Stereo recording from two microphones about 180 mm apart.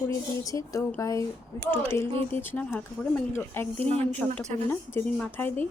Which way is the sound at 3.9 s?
35° right (ahead or behind).